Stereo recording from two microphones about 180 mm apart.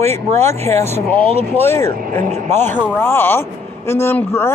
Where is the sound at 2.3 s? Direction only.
40° right (ahead or behind).